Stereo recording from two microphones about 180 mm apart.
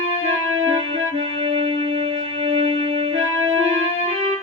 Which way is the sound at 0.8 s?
30° right (ahead or behind).